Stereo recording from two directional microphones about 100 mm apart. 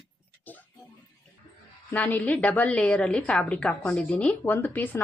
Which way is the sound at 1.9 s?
15° left (ahead or behind).